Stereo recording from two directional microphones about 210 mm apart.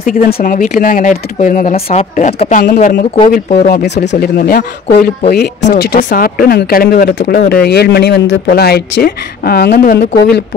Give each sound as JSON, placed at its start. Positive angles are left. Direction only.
{"t": 0.0, "sound": "speech", "side_deg": 45}